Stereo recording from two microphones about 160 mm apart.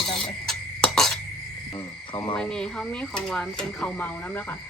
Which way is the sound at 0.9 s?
Centre (ahead or behind).